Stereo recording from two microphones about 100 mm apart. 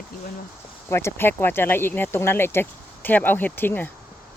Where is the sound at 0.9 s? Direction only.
25° left (ahead or behind).